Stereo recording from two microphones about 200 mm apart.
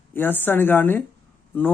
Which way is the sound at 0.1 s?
10° left (ahead or behind).